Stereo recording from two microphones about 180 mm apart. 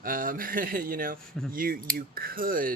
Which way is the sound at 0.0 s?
50° right (ahead or behind).